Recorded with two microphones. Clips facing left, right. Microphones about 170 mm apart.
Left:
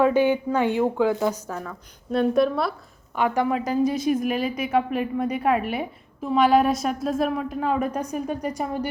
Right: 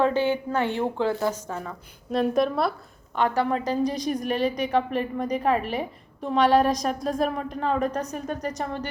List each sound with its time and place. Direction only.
0.0 s a woman's voice: 10° left (ahead or behind)
2.1 s a woman's voice: centre (ahead or behind)
3.2 s a woman's voice: 10° left (ahead or behind)